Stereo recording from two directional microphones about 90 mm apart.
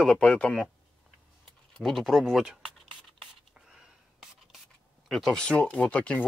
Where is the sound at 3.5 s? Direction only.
5° right (ahead or behind).